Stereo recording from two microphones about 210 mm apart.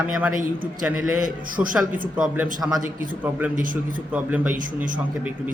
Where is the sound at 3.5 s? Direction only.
40° right (ahead or behind).